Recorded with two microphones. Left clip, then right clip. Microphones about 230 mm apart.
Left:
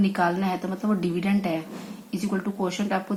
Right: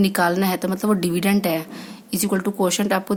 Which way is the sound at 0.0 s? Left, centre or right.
Right.